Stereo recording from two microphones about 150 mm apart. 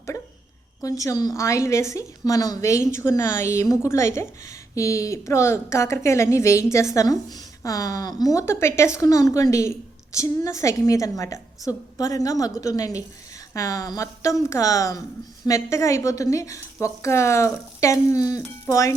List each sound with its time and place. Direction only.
0.8 s a woman's voice: 20° left (ahead or behind)